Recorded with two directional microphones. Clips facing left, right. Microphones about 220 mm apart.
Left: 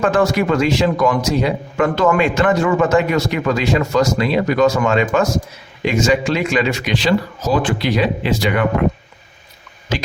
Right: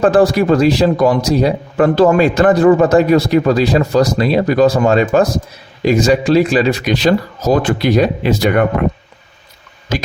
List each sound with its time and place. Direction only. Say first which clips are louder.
0.0 s speech: right 5 dB; 35° right (ahead or behind)